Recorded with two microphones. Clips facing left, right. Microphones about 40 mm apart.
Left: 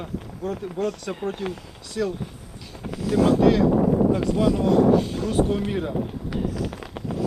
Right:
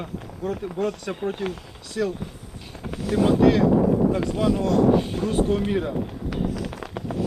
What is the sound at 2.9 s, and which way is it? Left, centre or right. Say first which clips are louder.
Vehicle: left 2 dB; right.